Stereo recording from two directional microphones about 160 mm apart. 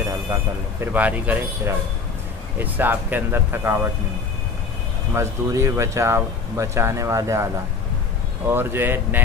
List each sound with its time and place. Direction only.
0.3 s speech: 10° right (ahead or behind)
5.1 s speech: 15° right (ahead or behind)
8.5 s speech: 15° right (ahead or behind)